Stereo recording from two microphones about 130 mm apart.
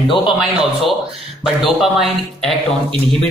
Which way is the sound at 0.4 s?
5° right (ahead or behind).